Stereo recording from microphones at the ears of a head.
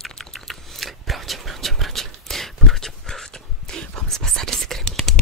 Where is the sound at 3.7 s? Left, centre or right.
Right.